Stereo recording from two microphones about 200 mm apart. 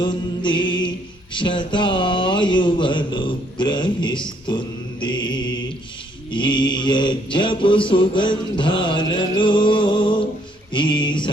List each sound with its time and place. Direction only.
0.0 s mantra: 25° left (ahead or behind)
1.3 s speech: 25° left (ahead or behind)
6.3 s mantra: 25° left (ahead or behind)
10.7 s a sound: 25° left (ahead or behind)